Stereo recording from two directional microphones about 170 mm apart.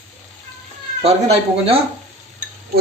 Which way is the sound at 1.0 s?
35° right (ahead or behind).